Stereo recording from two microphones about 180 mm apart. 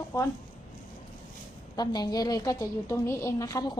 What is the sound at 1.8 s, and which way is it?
A woman's voice, 20° left (ahead or behind).